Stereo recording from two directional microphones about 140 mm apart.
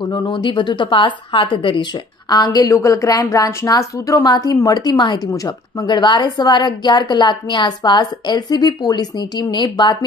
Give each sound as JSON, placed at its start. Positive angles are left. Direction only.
{"t": 0.0, "sound": "a woman's voice", "side_deg": 35}